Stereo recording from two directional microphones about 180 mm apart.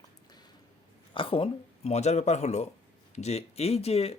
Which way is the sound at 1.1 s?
30° left (ahead or behind).